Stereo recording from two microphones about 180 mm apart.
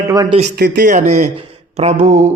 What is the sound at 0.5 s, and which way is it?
Speech, 55° right (ahead or behind).